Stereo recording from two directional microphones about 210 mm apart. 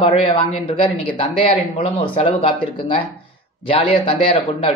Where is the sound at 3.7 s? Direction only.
25° left (ahead or behind).